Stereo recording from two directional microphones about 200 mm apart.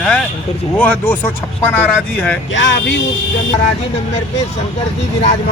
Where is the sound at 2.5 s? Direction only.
65° left (ahead or behind).